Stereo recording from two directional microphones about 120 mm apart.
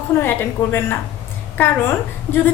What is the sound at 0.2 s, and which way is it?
A woman's voice, 15° left (ahead or behind).